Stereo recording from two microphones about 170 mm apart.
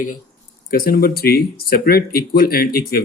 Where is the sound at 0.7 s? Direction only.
60° left (ahead or behind).